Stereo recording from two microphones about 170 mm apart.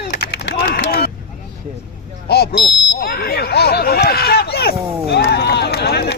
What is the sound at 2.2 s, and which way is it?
Buzzer, 70° left (ahead or behind).